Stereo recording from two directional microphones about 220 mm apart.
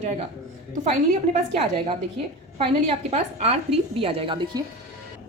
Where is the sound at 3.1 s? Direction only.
30° right (ahead or behind).